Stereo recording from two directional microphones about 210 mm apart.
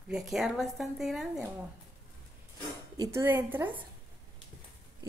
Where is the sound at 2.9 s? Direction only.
15° right (ahead or behind).